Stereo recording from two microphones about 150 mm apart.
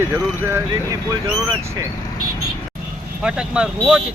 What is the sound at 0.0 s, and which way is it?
Speech, 15° right (ahead or behind).